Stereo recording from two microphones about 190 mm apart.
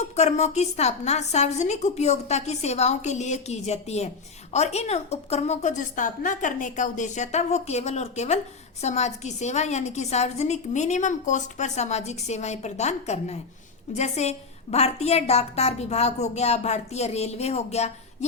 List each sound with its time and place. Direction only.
0.0 s a woman's voice: 35° left (ahead or behind)